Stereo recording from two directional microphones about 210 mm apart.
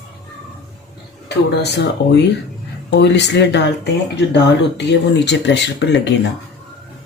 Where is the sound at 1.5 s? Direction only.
55° left (ahead or behind).